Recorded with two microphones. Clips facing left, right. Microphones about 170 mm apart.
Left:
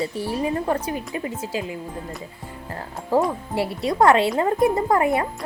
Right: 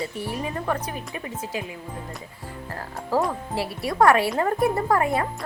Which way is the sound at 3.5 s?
25° left (ahead or behind).